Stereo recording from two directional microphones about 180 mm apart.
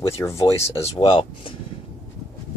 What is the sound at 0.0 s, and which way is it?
Speech, 15° left (ahead or behind).